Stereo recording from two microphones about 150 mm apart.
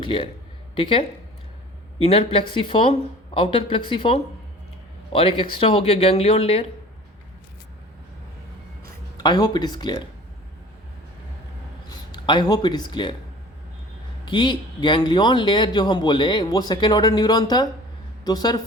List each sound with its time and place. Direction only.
0.0 s speech: 35° left (ahead or behind)
9.2 s speech: 30° left (ahead or behind)
11.9 s speech: 30° left (ahead or behind)
14.3 s speech: 30° left (ahead or behind)